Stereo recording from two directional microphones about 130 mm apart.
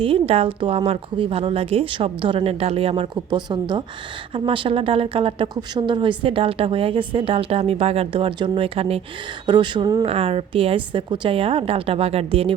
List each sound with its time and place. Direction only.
0.0 s a woman's voice: 45° right (ahead or behind)
9.5 s speech: 35° right (ahead or behind)
10.1 s a woman's voice: 45° right (ahead or behind)